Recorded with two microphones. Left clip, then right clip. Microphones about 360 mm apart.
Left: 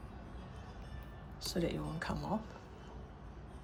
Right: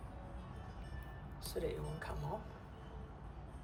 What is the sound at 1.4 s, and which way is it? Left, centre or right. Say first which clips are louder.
Speech: left 4 dB; centre.